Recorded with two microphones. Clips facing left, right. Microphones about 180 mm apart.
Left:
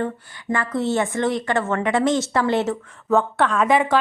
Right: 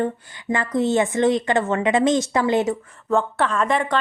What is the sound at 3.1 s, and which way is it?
Speech, centre (ahead or behind).